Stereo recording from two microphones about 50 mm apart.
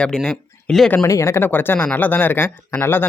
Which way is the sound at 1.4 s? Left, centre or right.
Left.